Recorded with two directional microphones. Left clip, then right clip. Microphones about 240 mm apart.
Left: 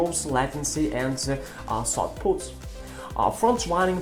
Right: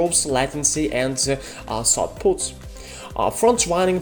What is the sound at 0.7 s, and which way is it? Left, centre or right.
Speech, right.